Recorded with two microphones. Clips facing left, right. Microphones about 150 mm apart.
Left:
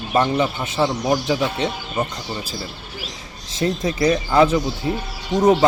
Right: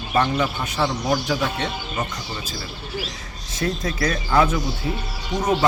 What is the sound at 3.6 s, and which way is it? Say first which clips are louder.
Speech: left 4 dB; 20° left (ahead or behind).